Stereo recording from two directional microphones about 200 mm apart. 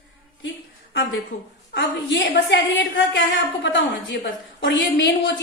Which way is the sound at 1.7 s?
60° left (ahead or behind).